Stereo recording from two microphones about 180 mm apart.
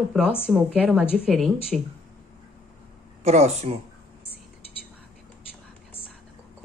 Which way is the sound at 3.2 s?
35° right (ahead or behind).